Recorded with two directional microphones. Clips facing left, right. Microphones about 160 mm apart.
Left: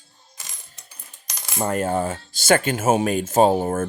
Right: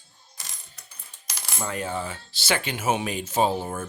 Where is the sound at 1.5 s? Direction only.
50° left (ahead or behind).